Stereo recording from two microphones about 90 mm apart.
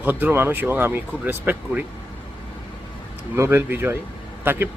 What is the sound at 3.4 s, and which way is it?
Speech, 25° right (ahead or behind).